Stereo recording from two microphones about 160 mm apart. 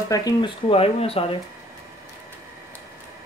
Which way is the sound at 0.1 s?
25° left (ahead or behind).